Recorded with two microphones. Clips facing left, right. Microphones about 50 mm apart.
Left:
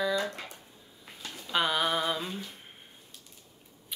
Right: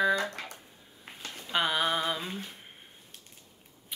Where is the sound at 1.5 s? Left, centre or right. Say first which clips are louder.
Even; centre.